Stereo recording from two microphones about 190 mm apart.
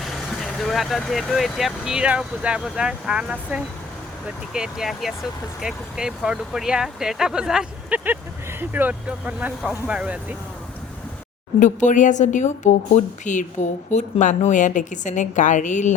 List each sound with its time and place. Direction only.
0.0 s speech: centre (ahead or behind)
11.6 s a woman's voice: 40° left (ahead or behind)